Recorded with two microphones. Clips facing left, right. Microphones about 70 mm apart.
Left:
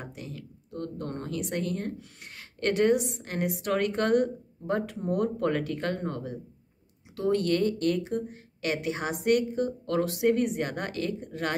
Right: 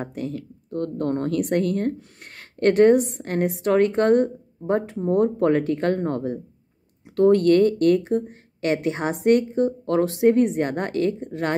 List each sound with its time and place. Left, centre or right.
0.0 s speech: right